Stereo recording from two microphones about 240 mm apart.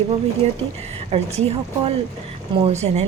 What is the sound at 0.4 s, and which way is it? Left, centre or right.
Speech, right.